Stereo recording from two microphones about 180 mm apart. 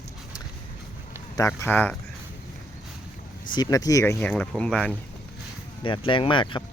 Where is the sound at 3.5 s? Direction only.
20° left (ahead or behind).